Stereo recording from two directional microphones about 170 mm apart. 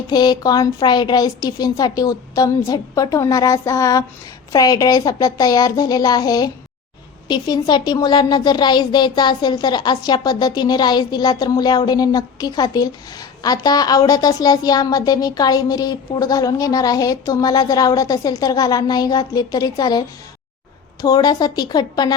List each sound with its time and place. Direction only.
0.1 s a woman's voice: 25° left (ahead or behind)